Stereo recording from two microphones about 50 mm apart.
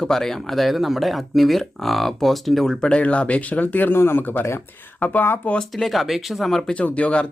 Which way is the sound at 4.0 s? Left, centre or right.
Left.